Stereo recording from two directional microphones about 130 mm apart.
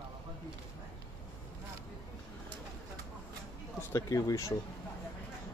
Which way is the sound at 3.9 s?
25° left (ahead or behind).